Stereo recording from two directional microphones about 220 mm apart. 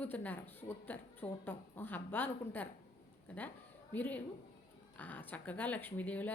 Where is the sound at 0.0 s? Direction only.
10° left (ahead or behind).